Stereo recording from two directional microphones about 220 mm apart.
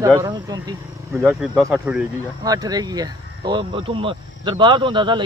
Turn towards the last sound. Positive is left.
turn(degrees=-20)  # may be behind; listen again after turning